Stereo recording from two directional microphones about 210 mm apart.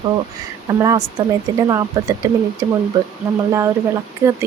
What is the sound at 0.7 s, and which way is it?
Speech, 15° right (ahead or behind).